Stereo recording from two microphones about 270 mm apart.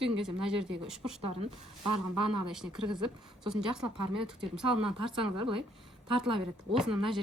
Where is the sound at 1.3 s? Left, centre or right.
Right.